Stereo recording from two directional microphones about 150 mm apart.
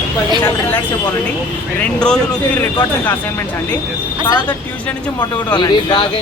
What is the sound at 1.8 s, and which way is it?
Speech, 5° left (ahead or behind).